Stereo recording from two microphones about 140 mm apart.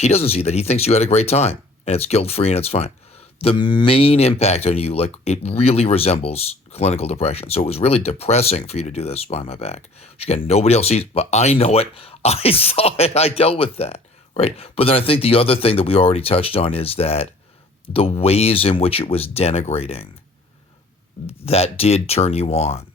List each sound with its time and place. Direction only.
0.0 s speech: 45° left (ahead or behind)
21.2 s speech: 45° left (ahead or behind)